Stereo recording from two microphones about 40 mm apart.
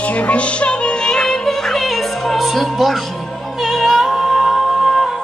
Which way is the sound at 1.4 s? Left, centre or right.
Centre.